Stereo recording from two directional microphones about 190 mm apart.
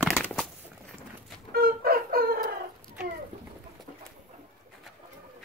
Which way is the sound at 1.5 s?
50° right (ahead or behind).